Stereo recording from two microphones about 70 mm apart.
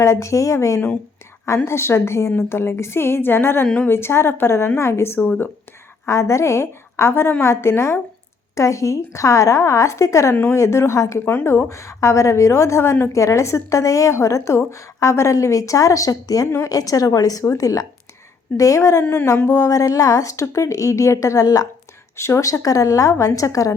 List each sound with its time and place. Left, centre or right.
0.0 s a woman's voice: left
11.3 s a woman's voice: left
11.7 s a woman's voice: left
19.0 s a woman's voice: left
19.5 s a woman's voice: left